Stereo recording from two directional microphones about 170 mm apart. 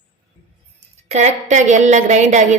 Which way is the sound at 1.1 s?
40° right (ahead or behind).